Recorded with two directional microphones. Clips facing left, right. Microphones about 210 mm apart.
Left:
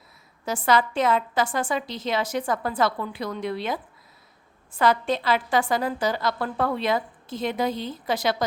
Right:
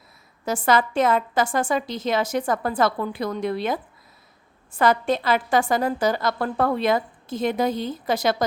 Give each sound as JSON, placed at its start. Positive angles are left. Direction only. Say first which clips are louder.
{"t": 0.4, "sound": "a woman's voice", "louder": "right 2 dB", "side_deg": -45}
{"t": 4.8, "sound": "a woman's voice", "louder": "right 2 dB", "side_deg": -45}